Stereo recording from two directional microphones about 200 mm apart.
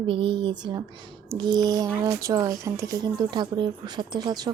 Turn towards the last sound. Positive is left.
turn(degrees=-20)  # may be behind; listen again after turning